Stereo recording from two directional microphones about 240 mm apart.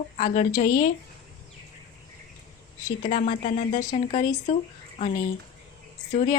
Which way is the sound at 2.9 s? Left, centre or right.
Left.